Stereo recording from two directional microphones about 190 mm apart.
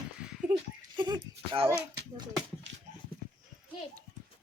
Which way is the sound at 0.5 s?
25° right (ahead or behind).